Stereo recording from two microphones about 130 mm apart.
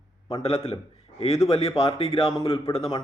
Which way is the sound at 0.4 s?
50° left (ahead or behind).